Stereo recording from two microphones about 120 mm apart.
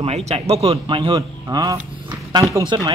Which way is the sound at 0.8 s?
45° right (ahead or behind).